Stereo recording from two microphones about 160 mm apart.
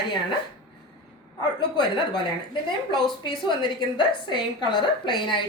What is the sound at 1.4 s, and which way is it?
A woman's voice, 30° left (ahead or behind).